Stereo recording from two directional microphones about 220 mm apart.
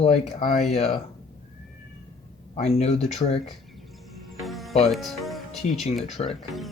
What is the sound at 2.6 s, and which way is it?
Speech, 30° left (ahead or behind).